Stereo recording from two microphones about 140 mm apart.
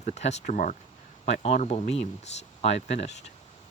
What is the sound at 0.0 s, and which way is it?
Speech, 55° left (ahead or behind).